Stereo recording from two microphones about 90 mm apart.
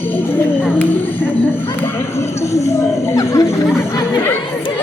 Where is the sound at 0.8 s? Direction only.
20° left (ahead or behind).